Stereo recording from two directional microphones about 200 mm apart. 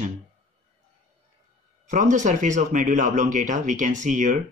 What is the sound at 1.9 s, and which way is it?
Speech, 40° right (ahead or behind).